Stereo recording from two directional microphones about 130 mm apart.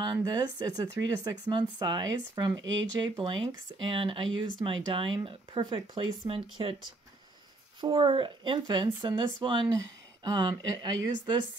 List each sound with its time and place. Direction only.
0.0 s speech: 30° right (ahead or behind)
7.8 s speech: 40° right (ahead or behind)